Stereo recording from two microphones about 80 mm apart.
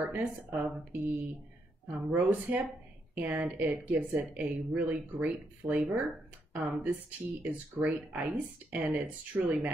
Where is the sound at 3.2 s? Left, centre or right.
Right.